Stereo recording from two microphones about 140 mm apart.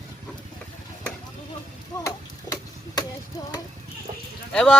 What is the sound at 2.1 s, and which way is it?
Chop, 25° left (ahead or behind).